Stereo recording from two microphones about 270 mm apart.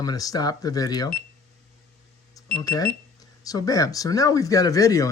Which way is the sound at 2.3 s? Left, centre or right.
Centre.